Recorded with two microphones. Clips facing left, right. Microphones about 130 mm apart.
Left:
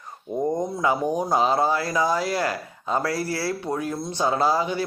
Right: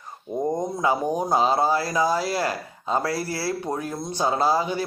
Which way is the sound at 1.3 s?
30° right (ahead or behind).